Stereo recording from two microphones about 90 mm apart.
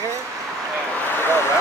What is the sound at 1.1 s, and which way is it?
Vehicle, 25° left (ahead or behind).